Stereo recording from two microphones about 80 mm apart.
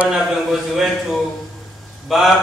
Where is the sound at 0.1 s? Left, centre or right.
Centre.